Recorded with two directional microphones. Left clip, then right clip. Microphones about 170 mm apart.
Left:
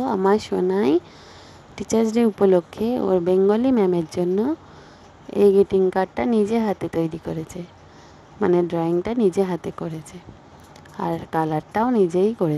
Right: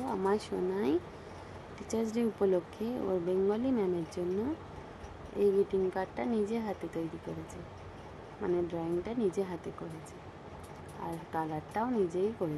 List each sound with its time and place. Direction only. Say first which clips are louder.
0.0 s speech: left 12 dB; 55° left (ahead or behind)
8.4 s speech: left 14 dB; 65° left (ahead or behind)
11.0 s speech: left 13 dB; 60° left (ahead or behind)